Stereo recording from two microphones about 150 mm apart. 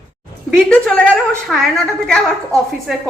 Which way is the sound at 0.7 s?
10° left (ahead or behind).